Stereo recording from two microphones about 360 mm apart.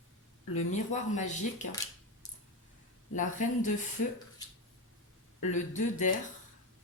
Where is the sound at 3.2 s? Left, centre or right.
Left.